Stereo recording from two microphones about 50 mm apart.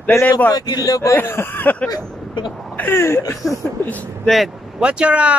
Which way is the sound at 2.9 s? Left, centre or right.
Left.